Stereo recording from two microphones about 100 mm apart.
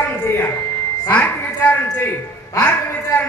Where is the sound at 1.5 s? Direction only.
25° left (ahead or behind).